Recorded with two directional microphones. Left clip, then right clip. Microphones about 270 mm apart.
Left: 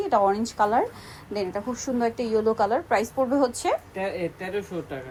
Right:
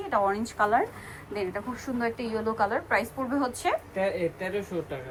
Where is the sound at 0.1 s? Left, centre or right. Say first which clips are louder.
Left 3 dB; centre.